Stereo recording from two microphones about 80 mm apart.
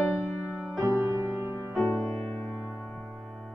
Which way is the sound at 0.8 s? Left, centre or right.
Right.